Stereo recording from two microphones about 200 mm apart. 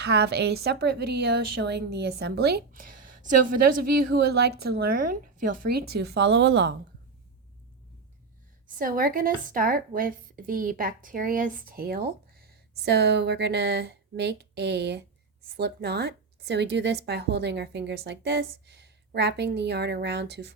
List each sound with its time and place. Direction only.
0.0 s a woman's voice: 55° right (ahead or behind)
8.8 s a woman's voice: 45° right (ahead or behind)